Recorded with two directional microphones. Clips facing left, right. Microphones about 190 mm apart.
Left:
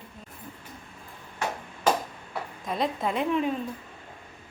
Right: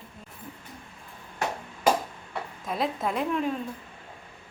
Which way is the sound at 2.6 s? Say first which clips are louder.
Left 1 dB; centre (ahead or behind).